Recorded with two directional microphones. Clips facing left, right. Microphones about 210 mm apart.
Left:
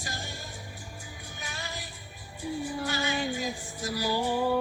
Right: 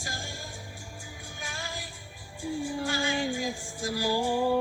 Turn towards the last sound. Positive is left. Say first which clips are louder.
# right 1 dB
turn(degrees=-10)  # may be behind; listen again after turning